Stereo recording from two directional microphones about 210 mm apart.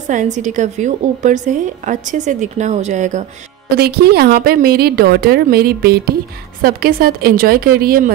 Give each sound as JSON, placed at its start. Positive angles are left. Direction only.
{"t": 0.1, "sound": "a woman's voice", "side_deg": -35}
{"t": 3.7, "sound": "a woman's voice", "side_deg": -50}